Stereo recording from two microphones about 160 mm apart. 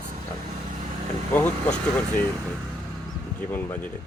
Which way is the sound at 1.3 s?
10° left (ahead or behind).